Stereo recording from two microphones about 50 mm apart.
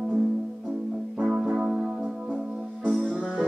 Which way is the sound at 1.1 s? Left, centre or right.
Centre.